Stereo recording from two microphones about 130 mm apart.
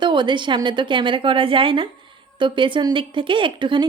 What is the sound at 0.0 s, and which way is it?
A woman's voice, 35° right (ahead or behind).